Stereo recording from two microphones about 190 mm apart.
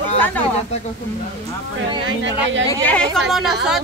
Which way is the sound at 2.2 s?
75° right (ahead or behind).